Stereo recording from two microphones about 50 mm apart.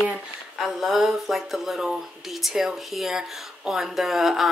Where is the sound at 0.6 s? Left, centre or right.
Centre.